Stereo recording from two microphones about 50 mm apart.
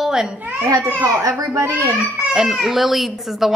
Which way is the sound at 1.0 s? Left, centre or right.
Right.